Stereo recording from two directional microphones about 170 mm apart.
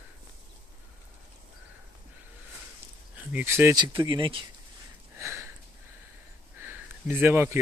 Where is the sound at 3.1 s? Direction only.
10° right (ahead or behind).